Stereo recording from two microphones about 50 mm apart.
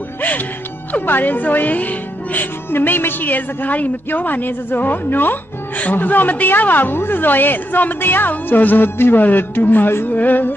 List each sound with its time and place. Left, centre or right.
0.9 s a woman's voice: left
2.7 s a woman's voice: left
9.2 s a woman's voice: left